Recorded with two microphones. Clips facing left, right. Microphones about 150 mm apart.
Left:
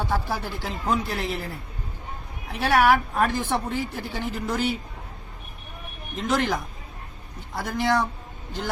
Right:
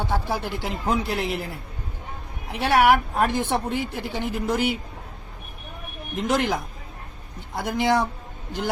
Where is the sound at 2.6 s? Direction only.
25° right (ahead or behind).